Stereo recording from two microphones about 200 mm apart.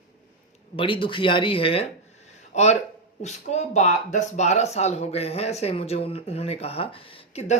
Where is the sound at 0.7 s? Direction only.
25° left (ahead or behind).